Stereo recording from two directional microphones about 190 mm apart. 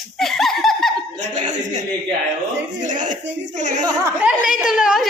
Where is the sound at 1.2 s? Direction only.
40° right (ahead or behind).